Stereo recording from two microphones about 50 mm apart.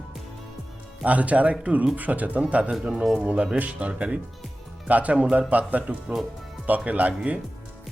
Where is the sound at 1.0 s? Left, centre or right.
Right.